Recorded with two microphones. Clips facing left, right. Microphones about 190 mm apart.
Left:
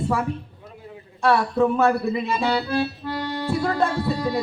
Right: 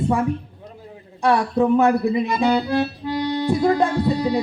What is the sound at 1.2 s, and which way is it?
Speech, 15° right (ahead or behind).